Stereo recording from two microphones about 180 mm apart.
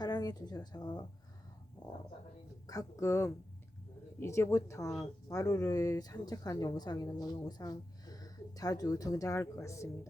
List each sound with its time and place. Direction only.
0.0 s a woman's voice: 20° left (ahead or behind)
2.6 s speech: 20° left (ahead or behind)